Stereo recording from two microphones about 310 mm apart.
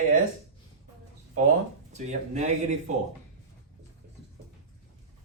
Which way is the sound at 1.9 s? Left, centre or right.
Right.